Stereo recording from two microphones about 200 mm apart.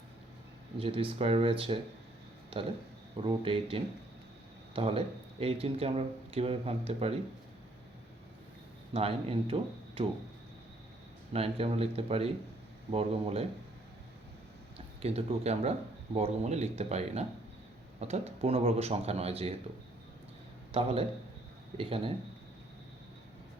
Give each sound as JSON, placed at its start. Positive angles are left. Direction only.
{"t": 0.8, "sound": "speech", "side_deg": -30}
{"t": 8.9, "sound": "speech", "side_deg": -30}
{"t": 11.3, "sound": "speech", "side_deg": -30}
{"t": 15.0, "sound": "speech", "side_deg": -30}
{"t": 20.7, "sound": "speech", "side_deg": -25}